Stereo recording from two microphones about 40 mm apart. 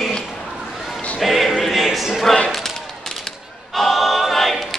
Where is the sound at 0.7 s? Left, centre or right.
Centre.